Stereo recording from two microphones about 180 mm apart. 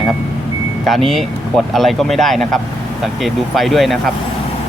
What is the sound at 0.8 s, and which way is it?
Speech, centre (ahead or behind).